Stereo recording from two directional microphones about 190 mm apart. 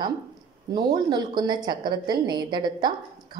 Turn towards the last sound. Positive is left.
turn(degrees=-25)  # may be behind; listen again after turning